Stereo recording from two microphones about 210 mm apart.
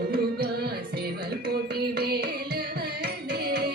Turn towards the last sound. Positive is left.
turn(degrees=-50)  # may be behind; listen again after turning